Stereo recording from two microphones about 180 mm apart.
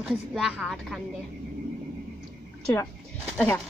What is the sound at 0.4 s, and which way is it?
Speech, 5° right (ahead or behind).